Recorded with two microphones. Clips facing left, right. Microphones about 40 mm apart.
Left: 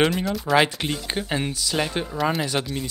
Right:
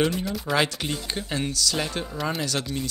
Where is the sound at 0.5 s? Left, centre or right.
Centre.